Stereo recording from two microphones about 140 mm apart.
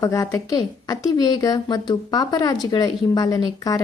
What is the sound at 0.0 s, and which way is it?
Speech, 20° left (ahead or behind).